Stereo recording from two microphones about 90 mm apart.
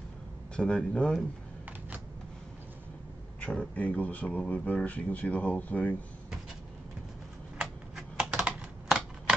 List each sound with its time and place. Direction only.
0.6 s speech: 10° left (ahead or behind)
3.3 s speech: 15° left (ahead or behind)
7.6 s typing: 5° right (ahead or behind)